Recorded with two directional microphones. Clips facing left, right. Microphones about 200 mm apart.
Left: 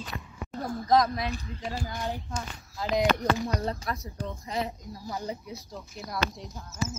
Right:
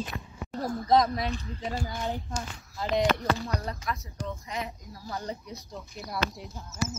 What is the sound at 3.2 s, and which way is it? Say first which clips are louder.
Speech: left 2 dB; 15° left (ahead or behind).